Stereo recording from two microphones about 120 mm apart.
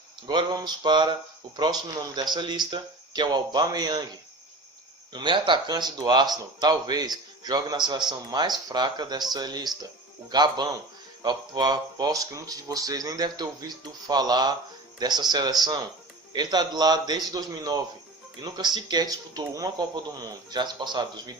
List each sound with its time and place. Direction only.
0.3 s speech: 35° right (ahead or behind)
5.1 s speech: 40° right (ahead or behind)